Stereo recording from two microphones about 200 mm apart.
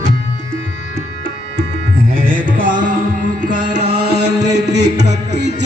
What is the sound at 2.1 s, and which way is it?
Music, 45° right (ahead or behind).